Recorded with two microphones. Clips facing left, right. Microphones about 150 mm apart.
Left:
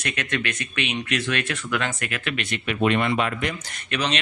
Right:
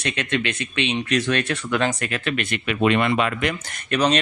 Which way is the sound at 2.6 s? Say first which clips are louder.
Right 2 dB; 90° right.